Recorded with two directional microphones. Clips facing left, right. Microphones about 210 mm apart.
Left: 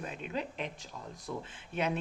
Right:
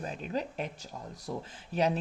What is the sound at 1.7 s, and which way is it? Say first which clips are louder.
Speech: right 4 dB; 35° right (ahead or behind).